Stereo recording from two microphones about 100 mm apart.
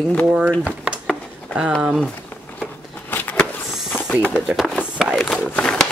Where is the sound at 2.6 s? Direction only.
20° left (ahead or behind).